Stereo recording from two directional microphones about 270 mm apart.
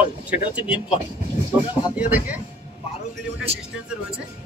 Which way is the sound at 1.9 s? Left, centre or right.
Centre.